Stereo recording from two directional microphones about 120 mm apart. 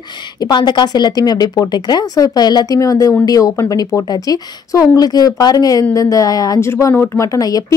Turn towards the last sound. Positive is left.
turn(degrees=30)  # may be behind; listen again after turning